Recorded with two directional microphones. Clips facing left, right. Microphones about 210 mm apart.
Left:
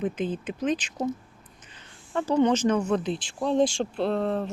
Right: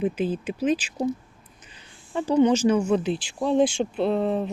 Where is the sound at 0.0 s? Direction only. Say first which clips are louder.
Right 3 dB; 10° right (ahead or behind).